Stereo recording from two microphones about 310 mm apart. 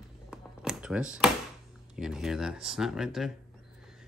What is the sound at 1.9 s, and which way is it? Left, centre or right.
Speech, centre.